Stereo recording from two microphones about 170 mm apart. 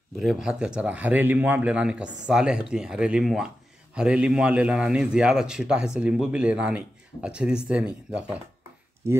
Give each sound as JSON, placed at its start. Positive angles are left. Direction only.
{"t": 0.2, "sound": "a man's voice", "side_deg": 0}